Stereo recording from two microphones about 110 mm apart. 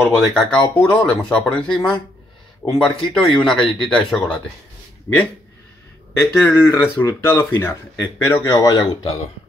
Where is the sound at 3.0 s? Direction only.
Centre (ahead or behind).